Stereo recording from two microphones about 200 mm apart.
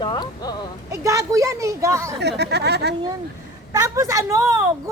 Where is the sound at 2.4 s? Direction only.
55° right (ahead or behind).